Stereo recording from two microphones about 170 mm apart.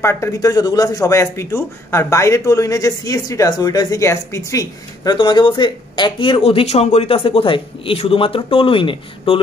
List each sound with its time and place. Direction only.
0.0 s speech: 15° left (ahead or behind)